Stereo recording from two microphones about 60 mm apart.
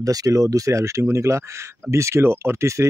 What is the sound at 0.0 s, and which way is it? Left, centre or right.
Speech, right.